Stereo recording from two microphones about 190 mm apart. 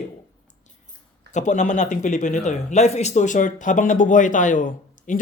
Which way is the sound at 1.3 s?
40° left (ahead or behind).